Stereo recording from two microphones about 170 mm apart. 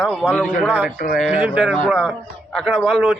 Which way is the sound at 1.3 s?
5° right (ahead or behind).